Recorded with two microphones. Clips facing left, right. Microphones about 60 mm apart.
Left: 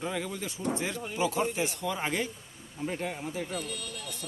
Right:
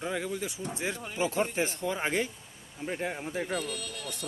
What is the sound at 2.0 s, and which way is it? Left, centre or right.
Speech, right.